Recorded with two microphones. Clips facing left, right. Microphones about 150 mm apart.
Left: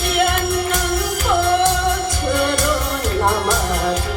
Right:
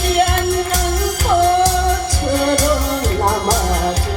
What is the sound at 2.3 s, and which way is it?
Music, 40° right (ahead or behind).